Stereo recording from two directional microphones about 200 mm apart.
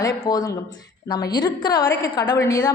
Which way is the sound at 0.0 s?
15° left (ahead or behind).